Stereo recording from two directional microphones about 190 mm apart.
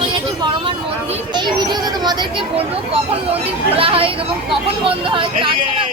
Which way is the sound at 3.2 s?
30° right (ahead or behind).